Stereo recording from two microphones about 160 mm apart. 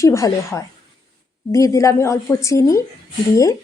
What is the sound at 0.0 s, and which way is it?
A woman's voice, 20° left (ahead or behind).